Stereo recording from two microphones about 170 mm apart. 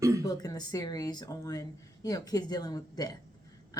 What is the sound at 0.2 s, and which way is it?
Speech, 20° left (ahead or behind).